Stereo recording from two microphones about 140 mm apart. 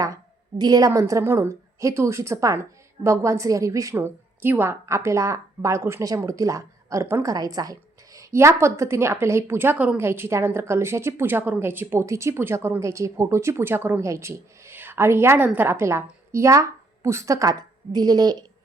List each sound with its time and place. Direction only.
0.6 s a woman's voice: 25° right (ahead or behind)